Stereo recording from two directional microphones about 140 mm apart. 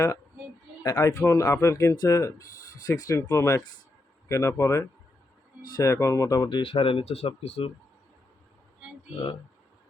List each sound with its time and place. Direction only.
0.9 s speech: 20° left (ahead or behind)
6.6 s speech: 40° left (ahead or behind)